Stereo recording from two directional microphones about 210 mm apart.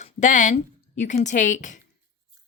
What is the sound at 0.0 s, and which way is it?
A woman's voice, 35° left (ahead or behind).